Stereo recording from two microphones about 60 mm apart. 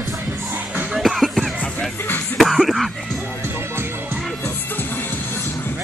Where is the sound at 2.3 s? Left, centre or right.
Centre.